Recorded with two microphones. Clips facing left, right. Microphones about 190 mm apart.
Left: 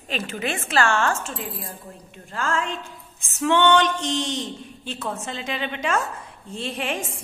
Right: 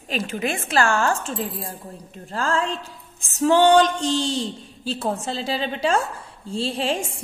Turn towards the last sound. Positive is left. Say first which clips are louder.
# right 4 dB
turn(degrees=-30)  # may be behind; listen again after turning